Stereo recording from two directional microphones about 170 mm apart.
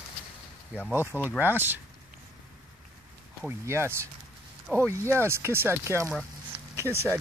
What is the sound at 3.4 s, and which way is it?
Speech, 15° right (ahead or behind).